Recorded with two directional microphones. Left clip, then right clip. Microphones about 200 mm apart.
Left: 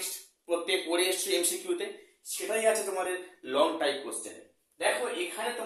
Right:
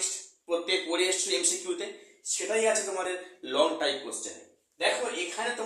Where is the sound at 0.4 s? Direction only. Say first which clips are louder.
Right 1 dB; 15° left (ahead or behind).